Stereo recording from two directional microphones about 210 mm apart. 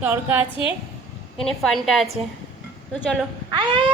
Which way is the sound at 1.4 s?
Centre (ahead or behind).